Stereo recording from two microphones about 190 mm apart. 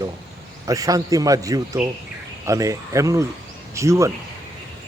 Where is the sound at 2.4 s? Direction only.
15° right (ahead or behind).